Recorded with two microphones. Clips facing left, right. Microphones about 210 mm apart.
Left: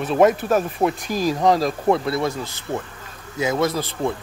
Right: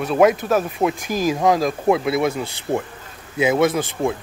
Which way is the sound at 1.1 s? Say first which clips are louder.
Right 1 dB; 45° right (ahead or behind).